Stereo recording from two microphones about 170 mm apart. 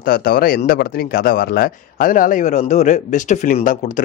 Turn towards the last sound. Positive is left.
turn(degrees=55)  # may be behind; listen again after turning